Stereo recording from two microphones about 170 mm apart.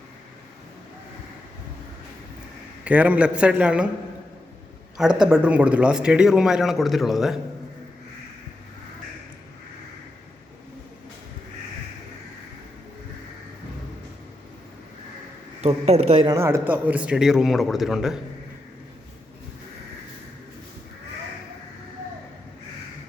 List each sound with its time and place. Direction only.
2.8 s a man's voice: 10° right (ahead or behind)
4.9 s speech: 5° right (ahead or behind)
15.6 s speech: 40° right (ahead or behind)
16.2 s speech: 15° right (ahead or behind)